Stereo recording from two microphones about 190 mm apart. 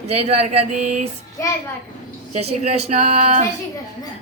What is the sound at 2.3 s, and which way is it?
Speech, 35° right (ahead or behind).